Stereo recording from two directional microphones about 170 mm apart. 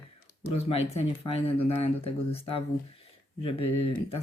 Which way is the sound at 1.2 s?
35° left (ahead or behind).